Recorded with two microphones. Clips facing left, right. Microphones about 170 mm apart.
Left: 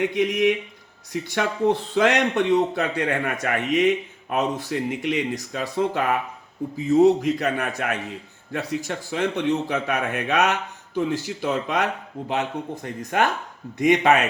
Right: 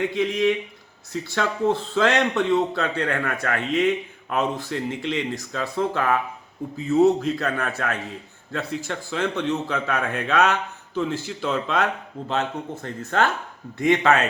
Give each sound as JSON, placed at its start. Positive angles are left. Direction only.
{"t": 0.0, "sound": "a man's voice", "side_deg": 20}